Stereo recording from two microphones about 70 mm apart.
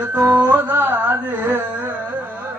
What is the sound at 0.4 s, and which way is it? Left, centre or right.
Carnatic music, right.